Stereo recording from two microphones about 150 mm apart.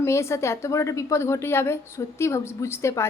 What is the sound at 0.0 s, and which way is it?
A woman's voice, 20° left (ahead or behind).